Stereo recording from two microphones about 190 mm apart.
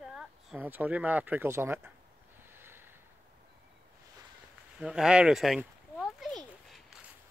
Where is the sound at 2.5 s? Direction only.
10° right (ahead or behind).